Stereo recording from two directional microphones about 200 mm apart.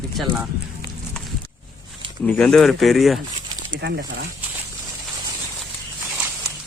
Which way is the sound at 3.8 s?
55° right (ahead or behind).